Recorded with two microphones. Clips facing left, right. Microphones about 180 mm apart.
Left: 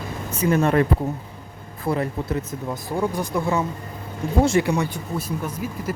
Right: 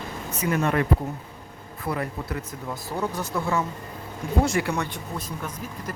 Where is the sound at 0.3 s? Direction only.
30° left (ahead or behind).